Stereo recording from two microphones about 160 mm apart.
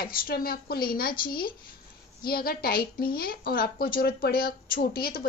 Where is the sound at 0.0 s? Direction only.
70° left (ahead or behind).